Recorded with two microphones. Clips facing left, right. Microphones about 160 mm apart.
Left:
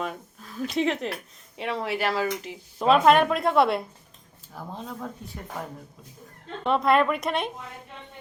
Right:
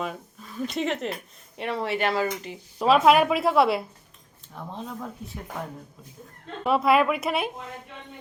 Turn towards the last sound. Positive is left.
turn(degrees=-5)  # may be behind; listen again after turning